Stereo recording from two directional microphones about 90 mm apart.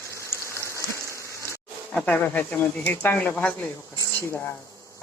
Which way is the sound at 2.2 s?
20° left (ahead or behind).